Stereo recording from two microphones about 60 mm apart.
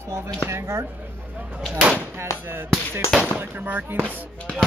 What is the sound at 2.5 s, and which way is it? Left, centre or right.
Chop, right.